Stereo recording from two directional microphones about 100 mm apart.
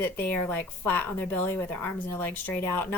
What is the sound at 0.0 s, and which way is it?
Speech, 15° left (ahead or behind).